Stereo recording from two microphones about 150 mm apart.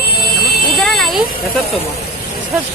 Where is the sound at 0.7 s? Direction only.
Centre (ahead or behind).